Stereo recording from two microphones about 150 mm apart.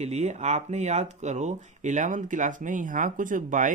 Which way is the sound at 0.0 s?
45° right (ahead or behind).